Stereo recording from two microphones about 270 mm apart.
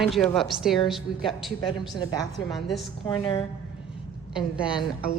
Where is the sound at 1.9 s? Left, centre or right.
Centre.